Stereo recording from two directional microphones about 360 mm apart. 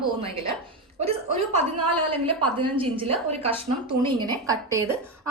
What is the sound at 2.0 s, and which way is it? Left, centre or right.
Speech, centre.